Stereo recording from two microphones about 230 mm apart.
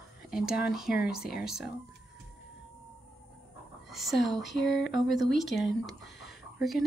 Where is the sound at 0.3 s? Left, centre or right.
Centre.